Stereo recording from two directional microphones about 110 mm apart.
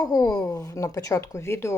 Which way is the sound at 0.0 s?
35° left (ahead or behind).